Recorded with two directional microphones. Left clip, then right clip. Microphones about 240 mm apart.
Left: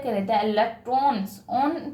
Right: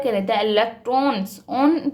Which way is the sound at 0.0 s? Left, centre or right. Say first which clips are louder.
Right 4 dB; right.